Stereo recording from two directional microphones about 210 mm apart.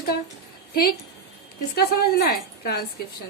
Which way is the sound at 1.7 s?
45° left (ahead or behind).